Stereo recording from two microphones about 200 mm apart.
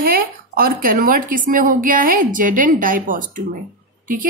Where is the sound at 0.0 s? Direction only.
45° right (ahead or behind).